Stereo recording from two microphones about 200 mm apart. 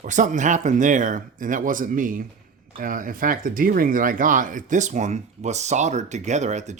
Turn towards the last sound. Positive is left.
turn(degrees=-35)  # may be behind; listen again after turning